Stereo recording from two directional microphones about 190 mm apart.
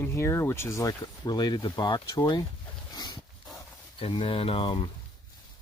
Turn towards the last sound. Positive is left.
turn(degrees=25)  # may be behind; listen again after turning